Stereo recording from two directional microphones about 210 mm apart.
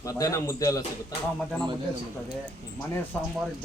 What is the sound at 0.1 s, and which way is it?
Speech, 15° left (ahead or behind).